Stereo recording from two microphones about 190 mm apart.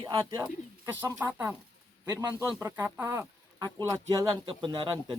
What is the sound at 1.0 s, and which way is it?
Speech, 10° right (ahead or behind).